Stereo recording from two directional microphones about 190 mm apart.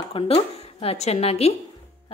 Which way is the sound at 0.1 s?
30° left (ahead or behind).